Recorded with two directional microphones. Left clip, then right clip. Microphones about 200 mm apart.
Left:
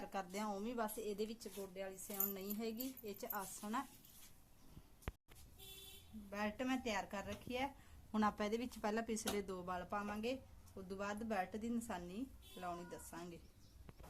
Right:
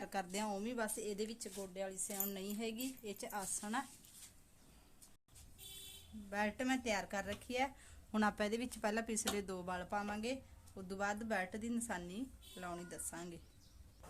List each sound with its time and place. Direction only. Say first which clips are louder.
0.0 s speech: right 3 dB; 40° right (ahead or behind)
6.3 s speech: right 4 dB; 45° right (ahead or behind)